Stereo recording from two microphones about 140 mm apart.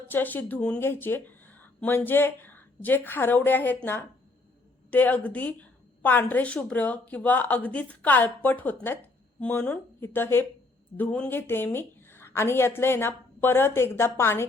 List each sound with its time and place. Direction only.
0.1 s a woman's voice: 15° left (ahead or behind)